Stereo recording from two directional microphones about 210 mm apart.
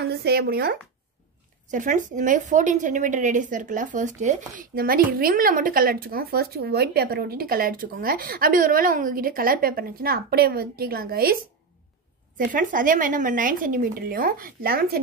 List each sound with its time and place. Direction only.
0.0 s speech: 50° right (ahead or behind)
1.7 s a woman's voice: 35° right (ahead or behind)
12.4 s speech: 40° right (ahead or behind)